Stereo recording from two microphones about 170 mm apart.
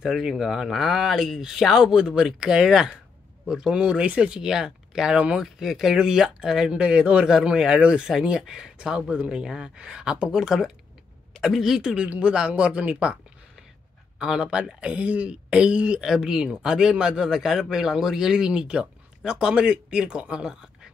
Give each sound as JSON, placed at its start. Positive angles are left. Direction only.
{"t": 0.0, "sound": "speech", "side_deg": -5}